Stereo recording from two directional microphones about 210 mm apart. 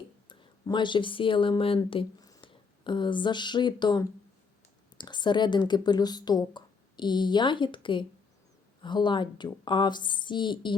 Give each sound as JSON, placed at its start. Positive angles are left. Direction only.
{"t": 0.3, "sound": "speech", "side_deg": 20}